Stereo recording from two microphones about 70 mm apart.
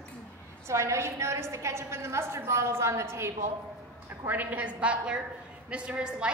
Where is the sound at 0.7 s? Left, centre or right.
Right.